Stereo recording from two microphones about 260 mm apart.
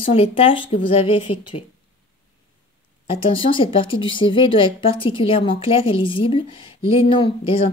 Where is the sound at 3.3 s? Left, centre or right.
Centre.